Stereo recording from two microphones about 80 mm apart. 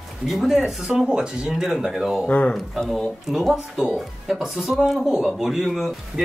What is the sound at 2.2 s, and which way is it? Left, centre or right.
Speech, centre.